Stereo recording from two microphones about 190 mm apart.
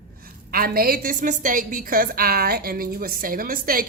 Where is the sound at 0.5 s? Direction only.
50° right (ahead or behind).